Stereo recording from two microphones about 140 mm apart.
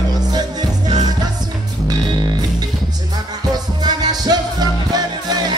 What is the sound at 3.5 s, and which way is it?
Music, 30° right (ahead or behind).